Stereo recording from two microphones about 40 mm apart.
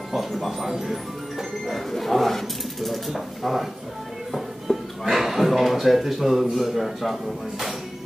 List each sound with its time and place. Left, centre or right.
0.1 s speech: centre
1.7 s speech: centre
4.3 s music: centre
6.5 s speech: centre